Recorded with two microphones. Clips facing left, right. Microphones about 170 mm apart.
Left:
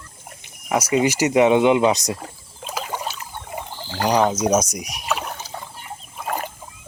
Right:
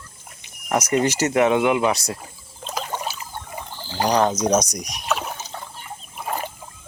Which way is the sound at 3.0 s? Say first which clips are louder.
Even; centre (ahead or behind).